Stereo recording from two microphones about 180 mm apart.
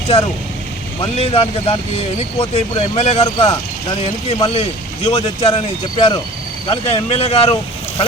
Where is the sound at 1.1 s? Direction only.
35° left (ahead or behind).